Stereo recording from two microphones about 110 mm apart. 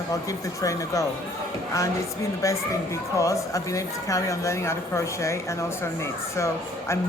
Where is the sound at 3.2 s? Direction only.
30° left (ahead or behind).